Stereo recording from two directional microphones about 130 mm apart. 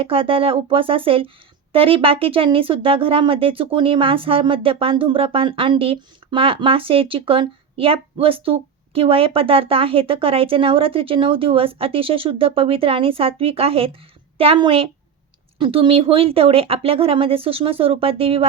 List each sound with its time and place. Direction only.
0.0 s speech: 45° right (ahead or behind)